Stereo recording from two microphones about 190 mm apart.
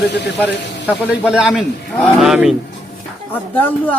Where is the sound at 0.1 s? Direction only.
65° left (ahead or behind).